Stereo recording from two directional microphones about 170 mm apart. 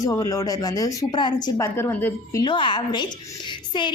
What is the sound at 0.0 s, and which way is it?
Speech, 20° left (ahead or behind).